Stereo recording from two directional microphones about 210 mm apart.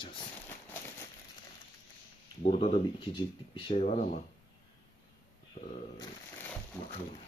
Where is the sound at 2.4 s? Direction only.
30° left (ahead or behind).